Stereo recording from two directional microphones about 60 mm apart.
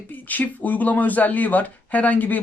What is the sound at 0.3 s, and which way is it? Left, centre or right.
Speech, left.